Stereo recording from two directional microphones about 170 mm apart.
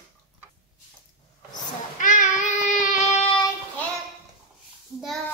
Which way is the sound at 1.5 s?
50° left (ahead or behind).